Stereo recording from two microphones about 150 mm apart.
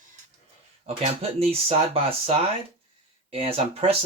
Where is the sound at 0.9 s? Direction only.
45° right (ahead or behind).